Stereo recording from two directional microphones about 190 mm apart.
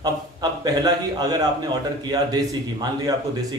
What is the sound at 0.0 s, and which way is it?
A man's voice, 20° right (ahead or behind).